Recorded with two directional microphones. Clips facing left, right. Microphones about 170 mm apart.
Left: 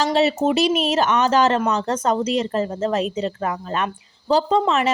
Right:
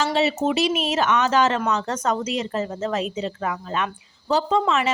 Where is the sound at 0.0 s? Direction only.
40° left (ahead or behind).